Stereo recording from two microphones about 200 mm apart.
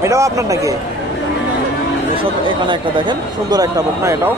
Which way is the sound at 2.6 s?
25° right (ahead or behind).